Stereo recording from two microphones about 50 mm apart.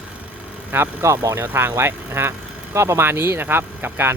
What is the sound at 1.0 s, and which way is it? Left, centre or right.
Speech, right.